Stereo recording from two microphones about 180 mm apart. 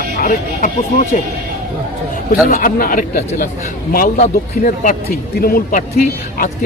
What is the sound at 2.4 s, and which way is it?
A man's voice, 50° left (ahead or behind).